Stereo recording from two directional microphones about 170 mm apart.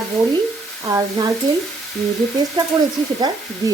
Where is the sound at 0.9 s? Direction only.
20° right (ahead or behind).